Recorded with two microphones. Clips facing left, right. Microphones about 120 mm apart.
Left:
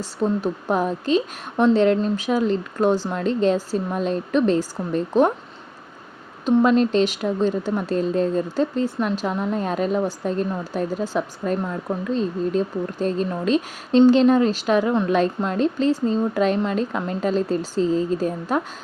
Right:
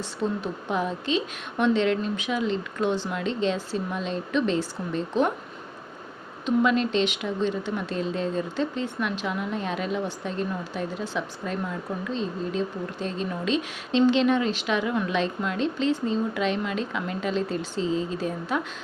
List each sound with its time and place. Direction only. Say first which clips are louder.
0.0 s speech: left 6 dB; 40° left (ahead or behind)
6.4 s a woman's voice: left 6 dB; 40° left (ahead or behind)